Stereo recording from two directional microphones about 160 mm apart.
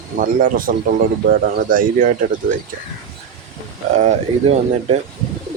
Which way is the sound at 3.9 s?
45° right (ahead or behind).